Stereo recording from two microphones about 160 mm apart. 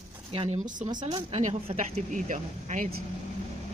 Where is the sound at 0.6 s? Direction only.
55° right (ahead or behind).